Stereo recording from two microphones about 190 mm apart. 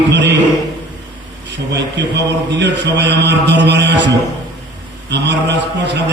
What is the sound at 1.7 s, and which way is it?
A man's voice, 65° right (ahead or behind).